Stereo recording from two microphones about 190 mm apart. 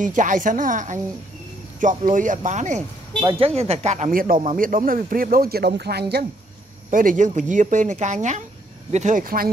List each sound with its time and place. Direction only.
0.0 s a man's voice: 45° right (ahead or behind)
3.2 s a man's voice: 25° right (ahead or behind); by 6.2 s 55° right (ahead or behind)
6.9 s a man's voice: 45° right (ahead or behind)